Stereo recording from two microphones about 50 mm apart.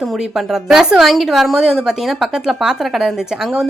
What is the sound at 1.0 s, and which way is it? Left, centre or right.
A woman's voice, centre.